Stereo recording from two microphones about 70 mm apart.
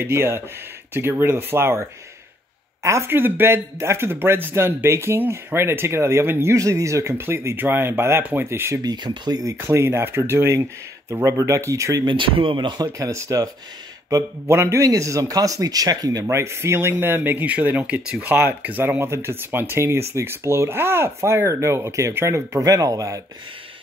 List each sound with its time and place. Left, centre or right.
0.0 s speech: right
3.1 s speech: right
6.5 s speech: right
8.8 s speech: right
9.6 s speech: right
12.6 s speech: right
13.1 s speech: right
14.5 s speech: right
16.3 s speech: right